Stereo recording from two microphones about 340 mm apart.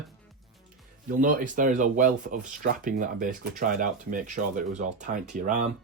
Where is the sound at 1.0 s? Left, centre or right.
Right.